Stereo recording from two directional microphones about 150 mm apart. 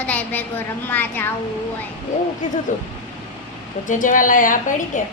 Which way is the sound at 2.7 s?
55° left (ahead or behind).